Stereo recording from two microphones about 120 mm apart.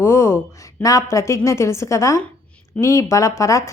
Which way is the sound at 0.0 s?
20° left (ahead or behind).